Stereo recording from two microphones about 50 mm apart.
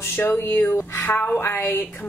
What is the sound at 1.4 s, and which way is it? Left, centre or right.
Speech, left.